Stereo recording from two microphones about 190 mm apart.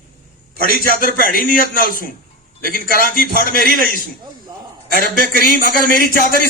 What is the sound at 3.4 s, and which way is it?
A man's voice, 50° right (ahead or behind).